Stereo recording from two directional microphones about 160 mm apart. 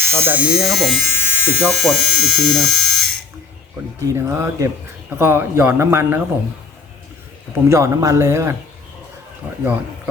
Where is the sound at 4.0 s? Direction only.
15° right (ahead or behind).